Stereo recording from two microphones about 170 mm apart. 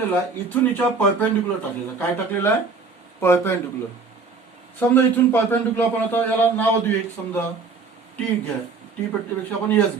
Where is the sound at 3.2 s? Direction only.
15° left (ahead or behind).